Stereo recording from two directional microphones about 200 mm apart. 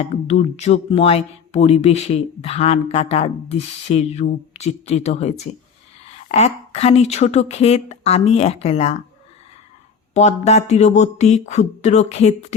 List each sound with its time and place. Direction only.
0.0 s speech: 35° left (ahead or behind)
10.2 s speech: 35° left (ahead or behind)